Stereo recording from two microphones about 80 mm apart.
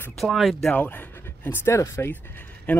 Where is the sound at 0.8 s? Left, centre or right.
Left.